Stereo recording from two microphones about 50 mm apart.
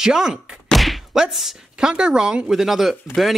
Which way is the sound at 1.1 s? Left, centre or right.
Centre.